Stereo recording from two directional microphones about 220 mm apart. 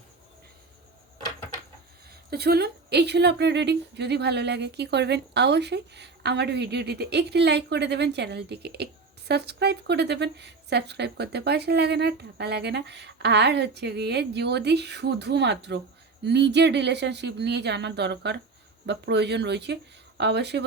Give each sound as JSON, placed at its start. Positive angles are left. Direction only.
{"t": 2.3, "sound": "a woman's voice", "side_deg": -45}